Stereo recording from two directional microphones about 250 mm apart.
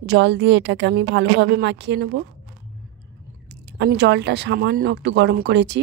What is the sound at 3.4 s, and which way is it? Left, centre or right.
Speech, right.